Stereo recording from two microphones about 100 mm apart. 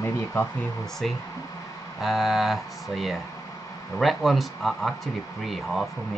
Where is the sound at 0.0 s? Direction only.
25° left (ahead or behind).